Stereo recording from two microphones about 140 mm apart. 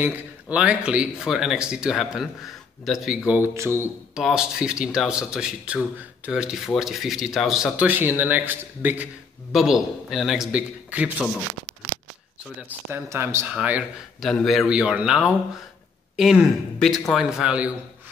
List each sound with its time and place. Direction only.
0.0 s speech: 10° right (ahead or behind)
3.3 s speech: 15° right (ahead or behind)
4.1 s speech: 5° right (ahead or behind)
12.9 s speech: 20° right (ahead or behind)
13.5 s speech: 10° right (ahead or behind)